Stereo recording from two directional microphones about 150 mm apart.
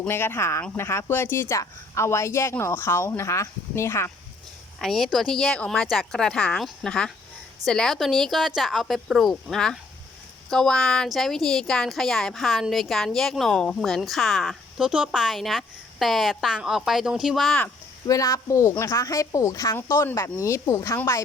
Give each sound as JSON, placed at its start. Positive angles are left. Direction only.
{"t": 0.0, "sound": "speech", "side_deg": 15}
{"t": 4.8, "sound": "speech", "side_deg": 0}
{"t": 18.0, "sound": "speech", "side_deg": 25}